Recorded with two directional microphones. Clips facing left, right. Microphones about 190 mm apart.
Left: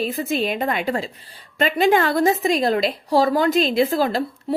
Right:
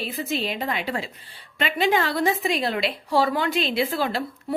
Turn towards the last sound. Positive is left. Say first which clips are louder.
# left 5 dB
turn(degrees=40)  # may be behind; listen again after turning